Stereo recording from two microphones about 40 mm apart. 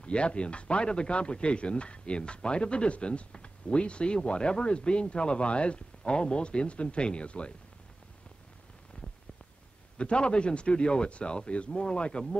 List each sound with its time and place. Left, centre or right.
0.0 s speech: left
9.9 s speech: left